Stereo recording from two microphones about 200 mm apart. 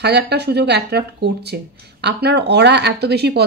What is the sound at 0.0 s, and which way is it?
Speech, 55° right (ahead or behind).